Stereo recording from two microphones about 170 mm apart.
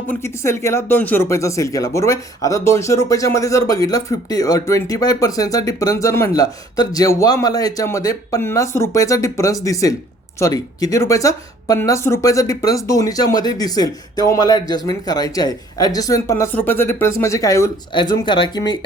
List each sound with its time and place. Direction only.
0.1 s speech: 15° left (ahead or behind)